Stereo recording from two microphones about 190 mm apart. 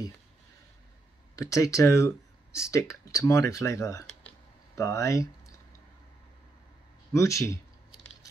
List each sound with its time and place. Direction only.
1.3 s speech: 15° left (ahead or behind)
7.1 s speech: 15° left (ahead or behind)